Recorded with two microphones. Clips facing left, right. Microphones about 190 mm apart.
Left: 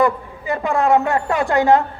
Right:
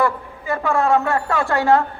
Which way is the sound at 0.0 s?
20° left (ahead or behind).